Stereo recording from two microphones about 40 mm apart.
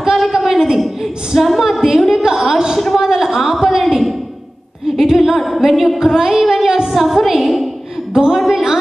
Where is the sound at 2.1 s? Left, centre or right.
Centre.